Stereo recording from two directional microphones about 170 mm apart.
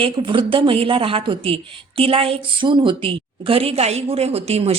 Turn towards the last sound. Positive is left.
turn(degrees=-35)  # may be behind; listen again after turning